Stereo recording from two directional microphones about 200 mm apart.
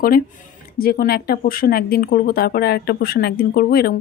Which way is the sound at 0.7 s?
50° left (ahead or behind).